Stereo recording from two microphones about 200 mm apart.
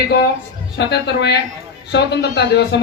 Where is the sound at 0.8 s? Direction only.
55° left (ahead or behind).